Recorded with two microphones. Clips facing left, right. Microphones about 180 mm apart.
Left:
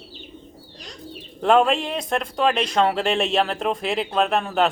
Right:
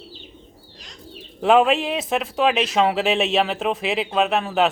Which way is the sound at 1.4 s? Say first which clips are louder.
Right 1 dB; 5° right (ahead or behind).